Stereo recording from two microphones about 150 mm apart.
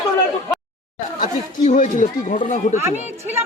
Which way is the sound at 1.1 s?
60° left (ahead or behind).